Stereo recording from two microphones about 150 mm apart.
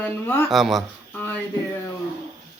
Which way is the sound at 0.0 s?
15° left (ahead or behind).